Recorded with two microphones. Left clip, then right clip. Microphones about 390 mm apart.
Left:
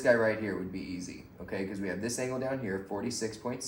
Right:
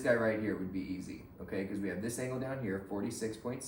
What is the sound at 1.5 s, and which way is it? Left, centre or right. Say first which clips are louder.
Speech: left 2 dB; centre.